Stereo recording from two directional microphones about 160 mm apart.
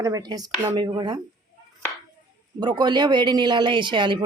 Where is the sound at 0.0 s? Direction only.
25° right (ahead or behind).